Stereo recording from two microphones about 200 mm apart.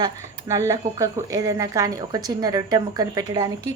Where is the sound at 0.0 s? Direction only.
15° right (ahead or behind).